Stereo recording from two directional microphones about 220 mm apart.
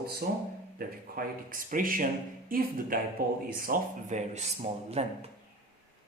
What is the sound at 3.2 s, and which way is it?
Speech, 45° right (ahead or behind).